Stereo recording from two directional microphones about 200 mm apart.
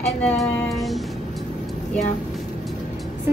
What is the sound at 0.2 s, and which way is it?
Speech, 5° left (ahead or behind).